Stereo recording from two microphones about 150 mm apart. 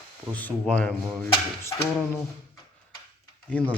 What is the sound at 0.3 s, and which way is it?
Speech, 10° left (ahead or behind).